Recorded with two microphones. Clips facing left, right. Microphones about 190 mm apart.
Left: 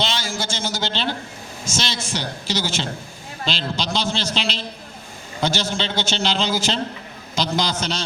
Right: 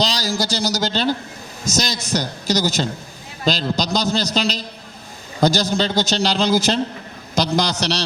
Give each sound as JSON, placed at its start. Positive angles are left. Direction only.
{"t": 0.0, "sound": "a man's voice", "side_deg": -35}
{"t": 7.7, "sound": "a man's voice", "side_deg": -75}